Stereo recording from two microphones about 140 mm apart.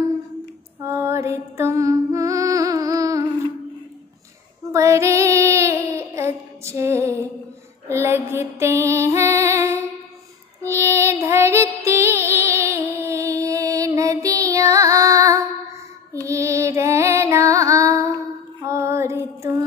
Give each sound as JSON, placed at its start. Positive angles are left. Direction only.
{"t": 0.8, "sound": "music", "side_deg": -20}
{"t": 4.7, "sound": "child singing", "side_deg": -20}
{"t": 7.9, "sound": "music", "side_deg": -20}